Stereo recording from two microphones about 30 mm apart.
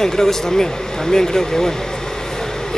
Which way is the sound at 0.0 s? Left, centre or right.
Centre.